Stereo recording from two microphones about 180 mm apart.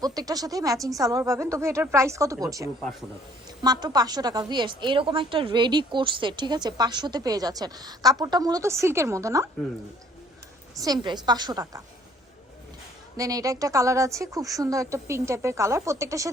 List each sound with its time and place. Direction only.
0.0 s a woman's voice: 20° right (ahead or behind)
10.8 s a woman's voice: 20° right (ahead or behind)
13.1 s speech: 20° right (ahead or behind)